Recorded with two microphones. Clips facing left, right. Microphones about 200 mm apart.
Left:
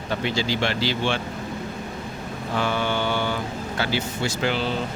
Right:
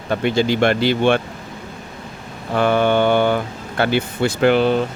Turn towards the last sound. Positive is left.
turn(degrees=-55)  # may be behind; listen again after turning